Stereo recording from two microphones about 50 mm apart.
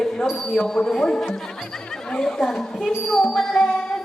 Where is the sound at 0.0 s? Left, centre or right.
Centre.